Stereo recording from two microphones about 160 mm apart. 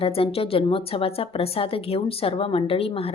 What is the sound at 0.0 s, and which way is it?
Speech, 35° left (ahead or behind).